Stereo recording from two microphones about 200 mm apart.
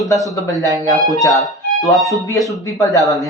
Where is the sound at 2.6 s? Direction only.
15° left (ahead or behind).